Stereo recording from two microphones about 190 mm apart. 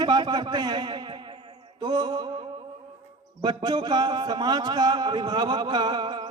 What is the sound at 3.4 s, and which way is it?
A man's voice, 20° right (ahead or behind).